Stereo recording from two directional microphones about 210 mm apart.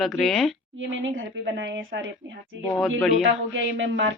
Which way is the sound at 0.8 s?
65° right (ahead or behind).